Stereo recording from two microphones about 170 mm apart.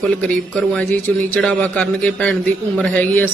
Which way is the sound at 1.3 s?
5° left (ahead or behind).